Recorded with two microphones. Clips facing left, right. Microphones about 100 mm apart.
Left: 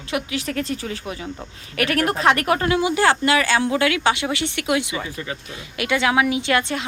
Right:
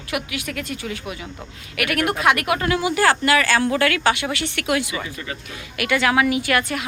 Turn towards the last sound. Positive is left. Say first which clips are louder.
# even
turn(degrees=25)  # may be behind; listen again after turning